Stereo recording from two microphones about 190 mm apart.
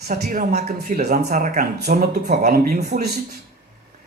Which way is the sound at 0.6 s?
40° right (ahead or behind).